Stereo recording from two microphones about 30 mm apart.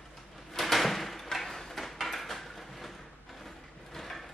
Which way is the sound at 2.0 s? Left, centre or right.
Centre.